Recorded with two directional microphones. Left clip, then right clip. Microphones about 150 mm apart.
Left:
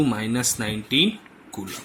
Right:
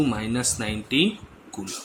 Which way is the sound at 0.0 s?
15° left (ahead or behind).